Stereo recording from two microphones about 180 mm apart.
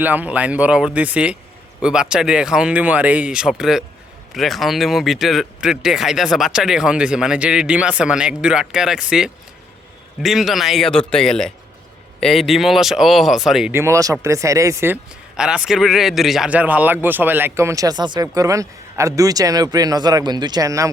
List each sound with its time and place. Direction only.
0.0 s a man's voice: 10° right (ahead or behind)
15.4 s a man's voice: 5° right (ahead or behind)